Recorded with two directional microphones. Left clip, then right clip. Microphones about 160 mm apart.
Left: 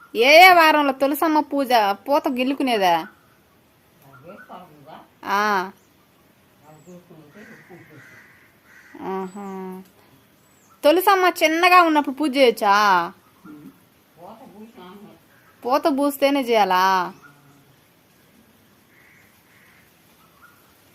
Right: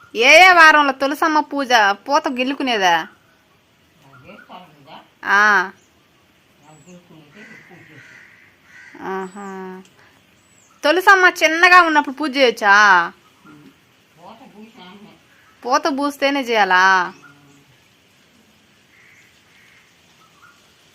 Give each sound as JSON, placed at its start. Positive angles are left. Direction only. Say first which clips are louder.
{"t": 0.1, "sound": "a woman's voice", "louder": "right 2 dB", "side_deg": -10}
{"t": 5.2, "sound": "speech", "louder": "right 7 dB", "side_deg": -5}
{"t": 9.0, "sound": "a woman's voice", "louder": "right 2 dB", "side_deg": -5}
{"t": 15.6, "sound": "speech", "louder": "right 1 dB", "side_deg": -5}